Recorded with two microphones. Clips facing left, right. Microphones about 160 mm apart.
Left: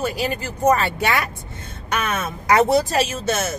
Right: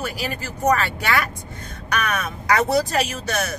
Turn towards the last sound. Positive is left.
turn(degrees=25)  # may be behind; listen again after turning